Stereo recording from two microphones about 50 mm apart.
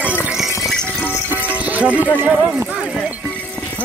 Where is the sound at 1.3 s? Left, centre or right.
Right.